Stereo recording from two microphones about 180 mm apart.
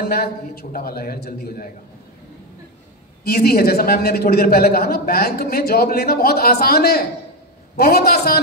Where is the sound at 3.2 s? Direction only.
60° left (ahead or behind).